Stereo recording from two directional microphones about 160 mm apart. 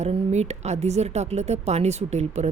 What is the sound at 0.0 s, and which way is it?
A woman's voice, 45° right (ahead or behind).